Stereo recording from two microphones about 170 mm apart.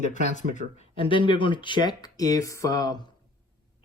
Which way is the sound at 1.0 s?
30° left (ahead or behind).